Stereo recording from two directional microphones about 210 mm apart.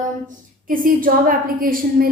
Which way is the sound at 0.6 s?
40° right (ahead or behind).